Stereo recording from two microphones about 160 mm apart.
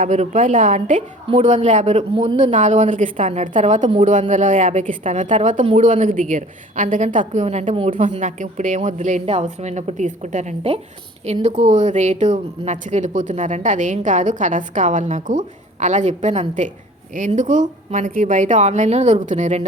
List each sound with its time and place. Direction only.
0.0 s speech: 50° right (ahead or behind)